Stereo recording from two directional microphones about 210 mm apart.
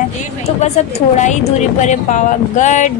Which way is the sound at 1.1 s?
35° left (ahead or behind).